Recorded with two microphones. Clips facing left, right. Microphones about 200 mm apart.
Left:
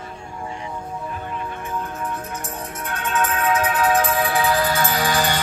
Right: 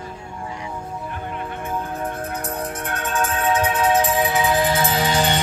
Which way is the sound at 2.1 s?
60° right (ahead or behind).